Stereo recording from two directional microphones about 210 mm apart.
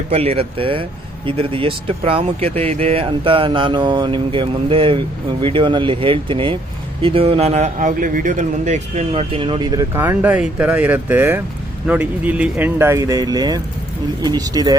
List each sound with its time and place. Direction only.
0.1 s speech: 30° right (ahead or behind)